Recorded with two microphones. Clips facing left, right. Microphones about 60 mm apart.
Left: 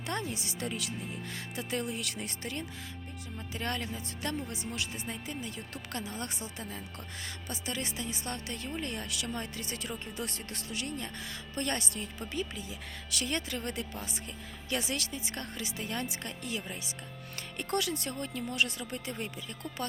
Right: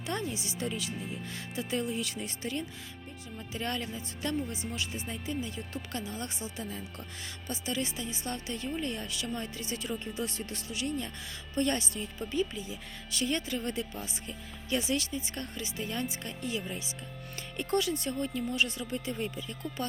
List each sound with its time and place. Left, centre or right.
0.0 s speech: left
9.0 s speech: left
9.3 s speech: left